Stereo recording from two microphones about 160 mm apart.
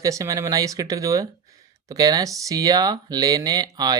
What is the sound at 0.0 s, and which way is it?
Speech, 20° right (ahead or behind).